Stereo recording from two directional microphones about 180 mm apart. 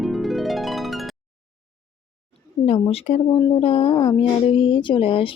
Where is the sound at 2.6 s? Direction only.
35° left (ahead or behind).